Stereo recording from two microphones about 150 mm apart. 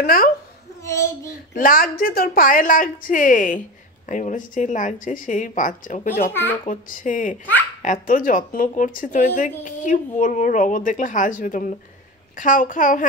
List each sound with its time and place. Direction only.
0.0 s a woman's voice: 70° left (ahead or behind)
0.8 s a child's voice: 20° left (ahead or behind)
1.5 s speech: 70° left (ahead or behind)